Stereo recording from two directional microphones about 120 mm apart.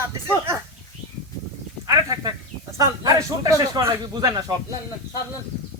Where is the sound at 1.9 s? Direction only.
30° right (ahead or behind).